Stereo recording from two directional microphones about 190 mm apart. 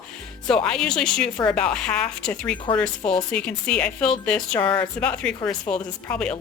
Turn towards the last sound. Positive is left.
turn(degrees=5)  # may be behind; listen again after turning